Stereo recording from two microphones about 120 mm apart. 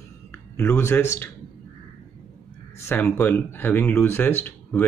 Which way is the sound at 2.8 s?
15° left (ahead or behind).